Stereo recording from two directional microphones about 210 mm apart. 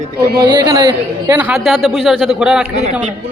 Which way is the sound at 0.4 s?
20° right (ahead or behind).